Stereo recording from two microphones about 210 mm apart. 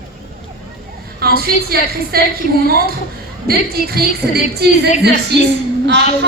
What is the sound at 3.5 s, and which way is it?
A woman's voice, 45° right (ahead or behind).